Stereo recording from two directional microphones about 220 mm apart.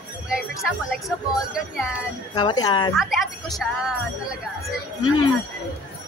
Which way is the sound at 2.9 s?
Centre (ahead or behind).